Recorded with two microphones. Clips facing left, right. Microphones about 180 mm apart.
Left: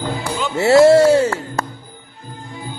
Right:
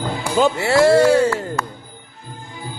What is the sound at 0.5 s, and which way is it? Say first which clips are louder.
Speech: left 7 dB; 25° left (ahead or behind).